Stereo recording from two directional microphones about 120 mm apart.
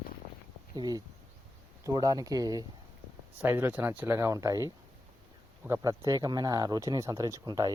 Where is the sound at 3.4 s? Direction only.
20° right (ahead or behind).